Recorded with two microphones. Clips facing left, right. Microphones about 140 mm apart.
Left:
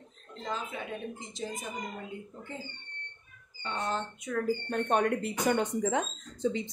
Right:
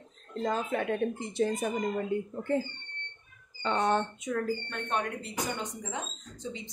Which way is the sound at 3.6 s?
70° right (ahead or behind).